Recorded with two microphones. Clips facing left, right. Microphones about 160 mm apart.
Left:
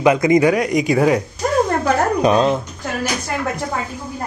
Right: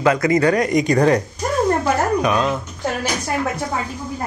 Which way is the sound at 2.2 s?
30° left (ahead or behind).